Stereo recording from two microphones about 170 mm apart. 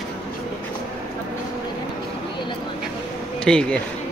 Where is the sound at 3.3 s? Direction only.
5° left (ahead or behind).